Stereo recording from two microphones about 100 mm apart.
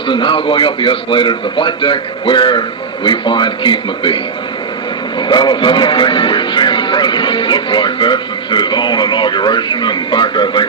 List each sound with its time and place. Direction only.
0.1 s a man's voice: 55° left (ahead or behind)
5.3 s a man's voice: 50° left (ahead or behind)